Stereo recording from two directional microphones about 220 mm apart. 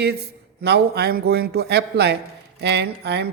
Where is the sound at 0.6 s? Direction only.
45° right (ahead or behind).